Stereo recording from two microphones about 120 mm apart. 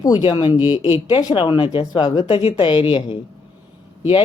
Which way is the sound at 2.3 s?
50° left (ahead or behind).